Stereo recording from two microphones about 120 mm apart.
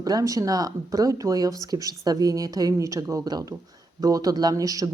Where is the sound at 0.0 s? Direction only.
30° right (ahead or behind).